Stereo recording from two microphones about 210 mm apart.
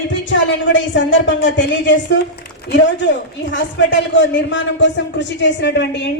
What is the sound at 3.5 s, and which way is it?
A woman's voice, 60° left (ahead or behind).